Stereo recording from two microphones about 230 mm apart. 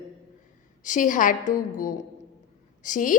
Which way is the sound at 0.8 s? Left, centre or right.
Left.